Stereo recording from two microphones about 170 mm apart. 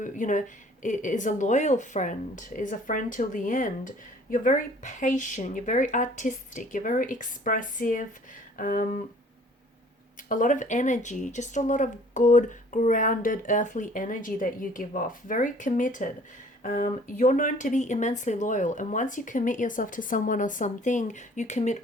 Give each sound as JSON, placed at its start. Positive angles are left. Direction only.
{"t": 0.0, "sound": "speech", "side_deg": 50}
{"t": 10.2, "sound": "speech", "side_deg": 50}